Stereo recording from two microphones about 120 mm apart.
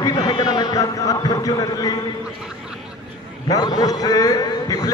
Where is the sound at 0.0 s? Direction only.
30° left (ahead or behind).